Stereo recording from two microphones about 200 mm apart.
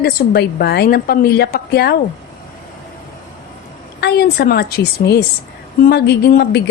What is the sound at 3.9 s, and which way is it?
A woman's voice, 55° left (ahead or behind).